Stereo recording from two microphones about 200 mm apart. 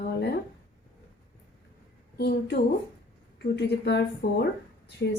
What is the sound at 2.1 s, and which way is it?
Speech, 55° left (ahead or behind).